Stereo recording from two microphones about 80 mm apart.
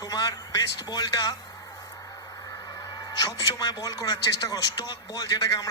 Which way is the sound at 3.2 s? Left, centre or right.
Left.